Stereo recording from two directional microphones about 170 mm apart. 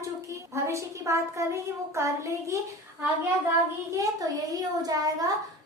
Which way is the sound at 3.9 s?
20° right (ahead or behind).